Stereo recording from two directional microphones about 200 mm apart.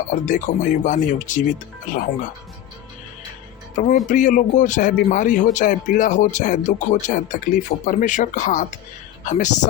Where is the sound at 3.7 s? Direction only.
40° left (ahead or behind).